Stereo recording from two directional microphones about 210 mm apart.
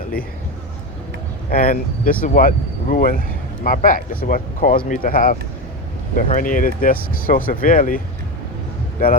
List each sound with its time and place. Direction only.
1.5 s speech: 40° left (ahead or behind)